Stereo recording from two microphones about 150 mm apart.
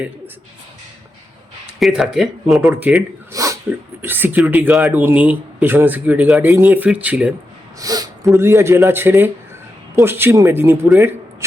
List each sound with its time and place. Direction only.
1.8 s speech: 5° right (ahead or behind)
3.3 s speech: 20° right (ahead or behind)
7.8 s speech: 25° right (ahead or behind)
10.9 s a sound: 15° right (ahead or behind)